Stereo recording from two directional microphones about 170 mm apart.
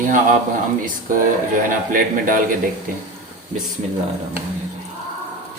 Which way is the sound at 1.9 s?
55° right (ahead or behind).